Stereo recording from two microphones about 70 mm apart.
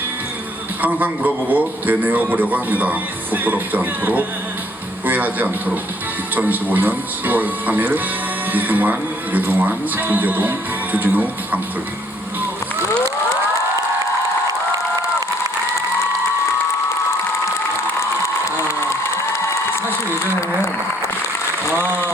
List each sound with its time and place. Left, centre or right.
0.8 s speech: right
21.7 s applause: right